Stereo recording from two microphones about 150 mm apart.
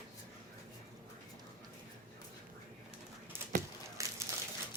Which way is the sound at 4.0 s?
20° right (ahead or behind).